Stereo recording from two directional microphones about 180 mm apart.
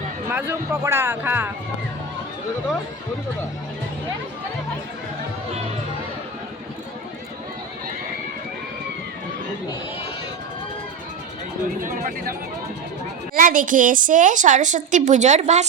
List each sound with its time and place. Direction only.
0.3 s speech: 10° right (ahead or behind)
11.8 s a woman's voice: 50° right (ahead or behind)
13.3 s a woman's voice: 50° right (ahead or behind)